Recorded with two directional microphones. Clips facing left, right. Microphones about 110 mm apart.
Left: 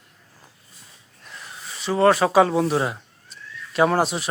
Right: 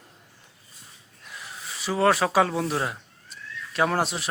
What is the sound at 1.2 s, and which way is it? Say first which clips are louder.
A child's voice: left 1 dB; 5° right (ahead or behind).